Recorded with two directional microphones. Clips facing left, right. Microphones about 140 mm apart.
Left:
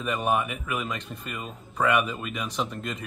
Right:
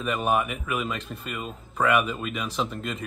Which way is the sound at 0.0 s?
5° right (ahead or behind).